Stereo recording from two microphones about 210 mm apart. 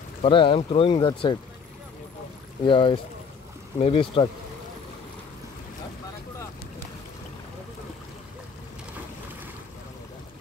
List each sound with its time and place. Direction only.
0.2 s speech: 25° left (ahead or behind)
2.6 s speech: 25° left (ahead or behind)